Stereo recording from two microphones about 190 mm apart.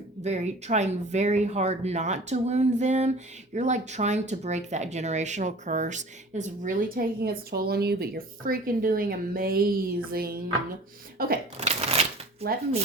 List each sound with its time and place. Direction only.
0.2 s speech: 35° right (ahead or behind)
10.1 s a sound: 50° right (ahead or behind)
11.5 s shuffling cards: 35° right (ahead or behind)